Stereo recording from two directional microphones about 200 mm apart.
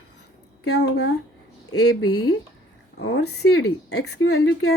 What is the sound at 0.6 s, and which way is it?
Speech, 60° left (ahead or behind).